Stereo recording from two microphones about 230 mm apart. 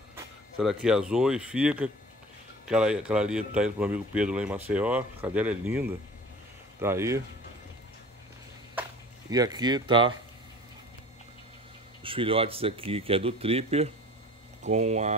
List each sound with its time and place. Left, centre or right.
0.6 s a man's voice: centre
8.8 s a sound: centre
9.3 s speech: centre
12.0 s speech: right